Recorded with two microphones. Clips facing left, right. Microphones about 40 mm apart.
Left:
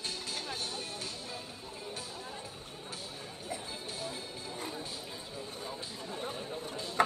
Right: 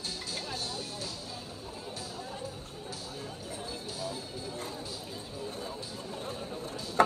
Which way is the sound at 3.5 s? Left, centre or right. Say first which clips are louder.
Left 2 dB; left.